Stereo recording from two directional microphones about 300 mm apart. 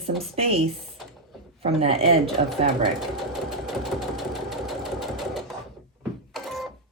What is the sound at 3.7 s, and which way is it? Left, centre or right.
Sewing machine, centre.